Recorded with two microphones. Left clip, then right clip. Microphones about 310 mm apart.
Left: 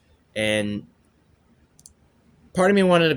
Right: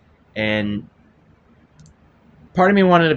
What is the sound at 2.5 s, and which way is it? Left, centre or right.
Speech, left.